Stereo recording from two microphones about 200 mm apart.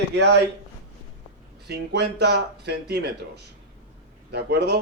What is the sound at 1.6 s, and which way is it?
Speech, 55° right (ahead or behind).